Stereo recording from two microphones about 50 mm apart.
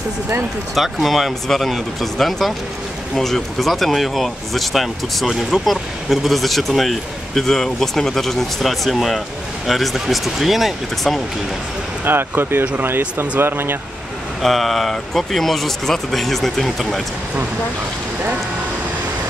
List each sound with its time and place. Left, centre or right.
0.7 s speech: centre
12.0 s speech: right
14.4 s speech: centre